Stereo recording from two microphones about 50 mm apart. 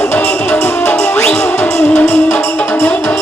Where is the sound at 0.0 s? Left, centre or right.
Left.